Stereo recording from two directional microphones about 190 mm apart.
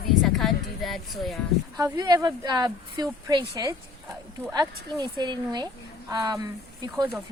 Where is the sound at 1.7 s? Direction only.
20° right (ahead or behind).